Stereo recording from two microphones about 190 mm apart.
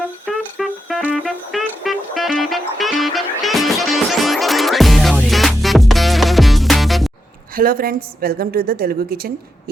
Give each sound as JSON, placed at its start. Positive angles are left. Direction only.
{"t": 0.3, "sound": "music", "side_deg": 0}
{"t": 7.5, "sound": "a woman's voice", "side_deg": -50}